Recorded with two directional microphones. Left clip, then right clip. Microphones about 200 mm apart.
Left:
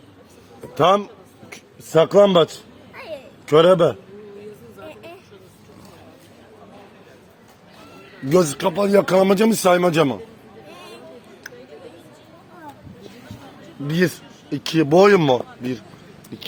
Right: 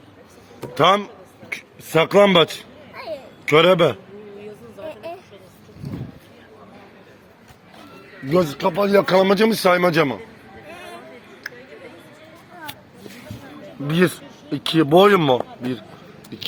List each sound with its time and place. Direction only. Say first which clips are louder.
0.7 s a sound: even; 10° right (ahead or behind)
8.3 s speech: left 1 dB; 45° left (ahead or behind)
13.8 s speech: right 2 dB; 15° right (ahead or behind)